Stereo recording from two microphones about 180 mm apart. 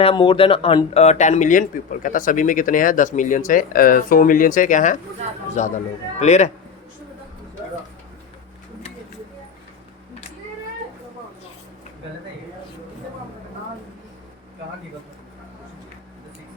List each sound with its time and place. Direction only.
0.0 s a man's voice: 30° left (ahead or behind)